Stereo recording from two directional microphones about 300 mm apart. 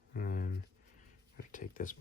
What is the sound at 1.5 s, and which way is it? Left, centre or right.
Speech, left.